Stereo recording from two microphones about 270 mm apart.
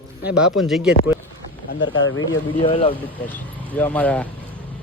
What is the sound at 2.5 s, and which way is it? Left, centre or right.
Speech, centre.